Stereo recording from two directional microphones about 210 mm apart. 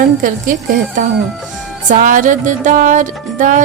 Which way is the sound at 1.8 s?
40° right (ahead or behind).